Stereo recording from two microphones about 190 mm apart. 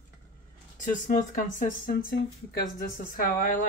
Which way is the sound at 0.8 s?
45° left (ahead or behind).